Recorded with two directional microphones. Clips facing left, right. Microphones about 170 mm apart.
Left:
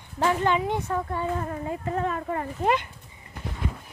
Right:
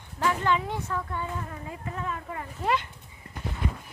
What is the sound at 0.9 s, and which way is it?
Speech, 40° left (ahead or behind).